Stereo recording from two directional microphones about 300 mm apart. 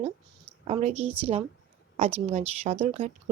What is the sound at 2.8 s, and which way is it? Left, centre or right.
Speech, right.